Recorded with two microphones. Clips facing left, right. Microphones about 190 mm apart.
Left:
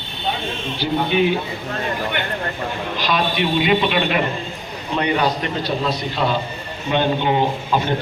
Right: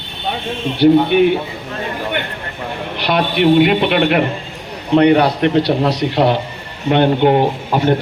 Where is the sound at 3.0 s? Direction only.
65° right (ahead or behind).